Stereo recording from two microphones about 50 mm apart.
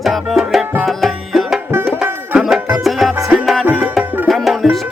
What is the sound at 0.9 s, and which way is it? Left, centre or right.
Tabla, centre.